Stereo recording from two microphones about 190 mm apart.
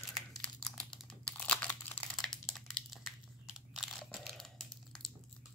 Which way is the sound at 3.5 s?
Centre (ahead or behind).